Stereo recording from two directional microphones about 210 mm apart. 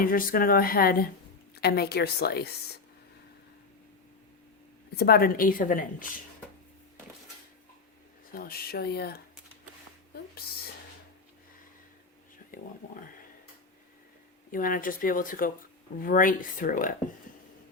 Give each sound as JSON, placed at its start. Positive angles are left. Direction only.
{"t": 0.0, "sound": "speech", "side_deg": 40}
{"t": 4.9, "sound": "a woman's voice", "side_deg": 45}
{"t": 8.3, "sound": "speech", "side_deg": 45}
{"t": 10.4, "sound": "speech", "side_deg": 50}
{"t": 14.5, "sound": "a woman's voice", "side_deg": 40}